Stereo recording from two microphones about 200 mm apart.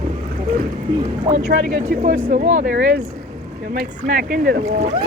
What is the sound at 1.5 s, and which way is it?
Speech, 45° right (ahead or behind).